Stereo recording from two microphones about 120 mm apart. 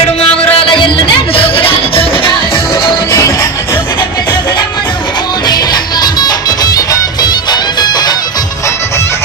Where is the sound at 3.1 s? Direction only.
25° left (ahead or behind).